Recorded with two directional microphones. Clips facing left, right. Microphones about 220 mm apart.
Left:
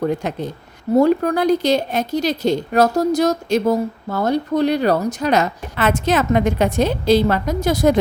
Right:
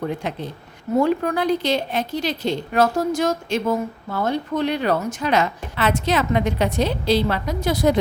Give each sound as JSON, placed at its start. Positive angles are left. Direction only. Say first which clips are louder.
{"t": 0.0, "sound": "a woman's voice", "louder": "left 5 dB", "side_deg": 45}